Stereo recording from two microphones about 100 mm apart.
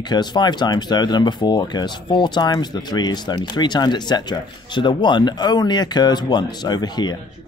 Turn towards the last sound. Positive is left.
turn(degrees=45)  # may be behind; listen again after turning